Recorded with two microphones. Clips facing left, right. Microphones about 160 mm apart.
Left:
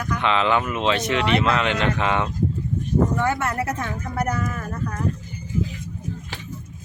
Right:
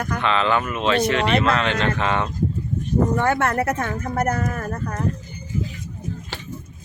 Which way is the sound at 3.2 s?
60° right (ahead or behind).